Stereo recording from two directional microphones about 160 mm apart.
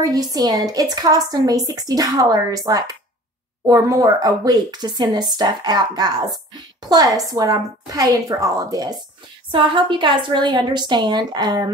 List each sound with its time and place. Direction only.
0.0 s speech: 25° right (ahead or behind)